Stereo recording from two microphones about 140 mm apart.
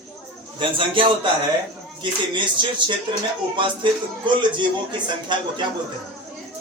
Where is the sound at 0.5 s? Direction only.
40° right (ahead or behind).